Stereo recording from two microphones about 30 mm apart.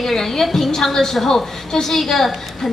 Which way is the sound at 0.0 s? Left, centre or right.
Centre.